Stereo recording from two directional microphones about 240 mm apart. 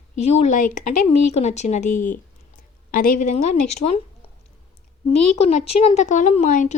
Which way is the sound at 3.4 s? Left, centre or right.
Left.